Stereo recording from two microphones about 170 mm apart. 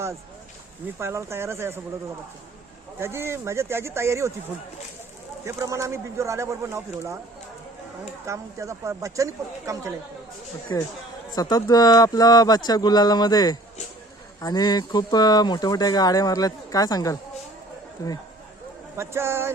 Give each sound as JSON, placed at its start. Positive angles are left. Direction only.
{"t": 0.9, "sound": "speech", "side_deg": -15}
{"t": 3.0, "sound": "speech", "side_deg": -15}
{"t": 5.5, "sound": "speech", "side_deg": -20}
{"t": 8.3, "sound": "speech", "side_deg": -20}
{"t": 10.7, "sound": "speech", "side_deg": 20}
{"t": 18.9, "sound": "speech", "side_deg": -15}